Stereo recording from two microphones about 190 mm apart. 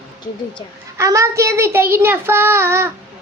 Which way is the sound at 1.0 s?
15° right (ahead or behind).